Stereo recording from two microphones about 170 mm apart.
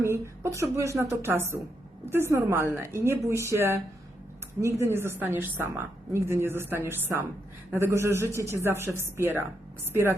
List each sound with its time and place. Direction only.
0.0 s a woman's voice: 15° right (ahead or behind)